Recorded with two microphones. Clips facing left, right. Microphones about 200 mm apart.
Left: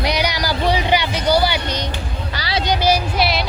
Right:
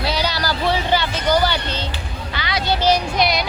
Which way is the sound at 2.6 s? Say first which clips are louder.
Even; 15° left (ahead or behind).